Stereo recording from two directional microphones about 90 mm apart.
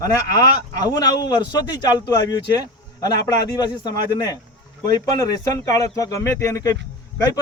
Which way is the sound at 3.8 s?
45° left (ahead or behind).